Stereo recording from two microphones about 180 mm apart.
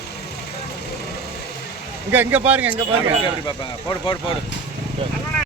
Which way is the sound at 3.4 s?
25° left (ahead or behind).